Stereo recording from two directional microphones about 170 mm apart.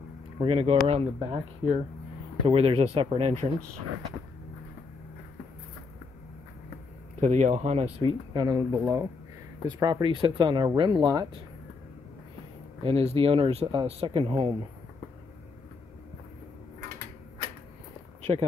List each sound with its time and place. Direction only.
0.4 s speech: 35° right (ahead or behind)
7.2 s speech: 45° right (ahead or behind)
8.3 s speech: 20° right (ahead or behind)
12.8 s speech: 35° right (ahead or behind)